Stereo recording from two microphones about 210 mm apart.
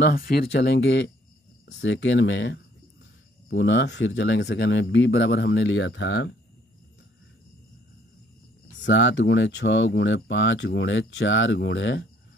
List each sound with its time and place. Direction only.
0.0 s speech: 45° left (ahead or behind); by 6.2 s 65° left (ahead or behind)
8.8 s speech: 60° left (ahead or behind)